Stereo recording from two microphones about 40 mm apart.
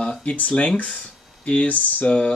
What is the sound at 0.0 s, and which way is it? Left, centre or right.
Speech, left.